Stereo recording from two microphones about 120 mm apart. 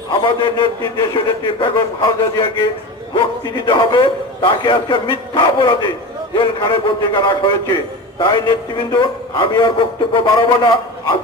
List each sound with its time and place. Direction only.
0.1 s a man's voice: 40° left (ahead or behind)